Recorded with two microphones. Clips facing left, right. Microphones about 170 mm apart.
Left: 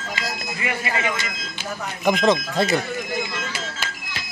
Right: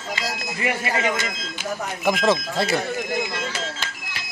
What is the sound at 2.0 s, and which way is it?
Speech, 5° right (ahead or behind).